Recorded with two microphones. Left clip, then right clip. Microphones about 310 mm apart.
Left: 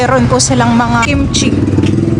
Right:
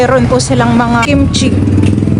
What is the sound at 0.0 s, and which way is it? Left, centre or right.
A man's voice, centre.